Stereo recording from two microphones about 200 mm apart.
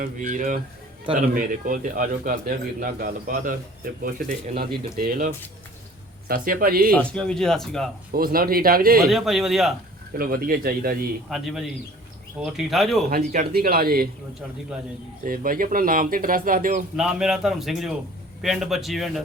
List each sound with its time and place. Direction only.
0.0 s speech: 40° right (ahead or behind)
6.9 s speech: 5° left (ahead or behind)
8.1 s speech: 45° right (ahead or behind)
9.0 s speech: centre (ahead or behind)
10.2 s speech: 45° right (ahead or behind)
11.3 s speech: centre (ahead or behind)
13.1 s speech: 45° right (ahead or behind)
15.2 s speech: 45° right (ahead or behind)
17.0 s speech: 5° right (ahead or behind)